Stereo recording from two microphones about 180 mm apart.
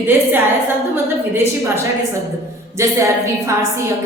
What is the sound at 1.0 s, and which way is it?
A woman's voice, 15° right (ahead or behind).